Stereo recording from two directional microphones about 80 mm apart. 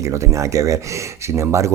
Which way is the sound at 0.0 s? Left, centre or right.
Right.